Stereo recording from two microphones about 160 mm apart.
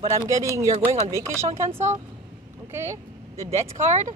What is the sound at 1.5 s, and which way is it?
Speech, 15° right (ahead or behind).